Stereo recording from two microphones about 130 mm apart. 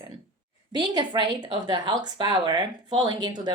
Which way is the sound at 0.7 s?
35° right (ahead or behind).